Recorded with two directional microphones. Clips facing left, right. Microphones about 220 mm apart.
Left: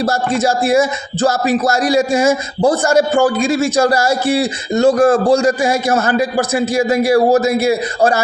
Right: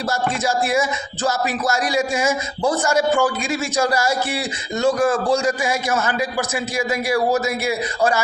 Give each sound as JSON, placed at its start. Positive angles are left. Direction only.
{"t": 0.0, "sound": "speech", "side_deg": 35}